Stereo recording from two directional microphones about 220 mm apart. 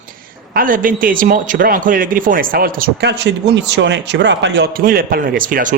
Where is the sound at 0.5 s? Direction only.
40° right (ahead or behind).